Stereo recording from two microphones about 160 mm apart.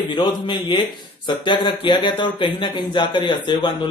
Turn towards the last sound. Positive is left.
turn(degrees=30)  # may be behind; listen again after turning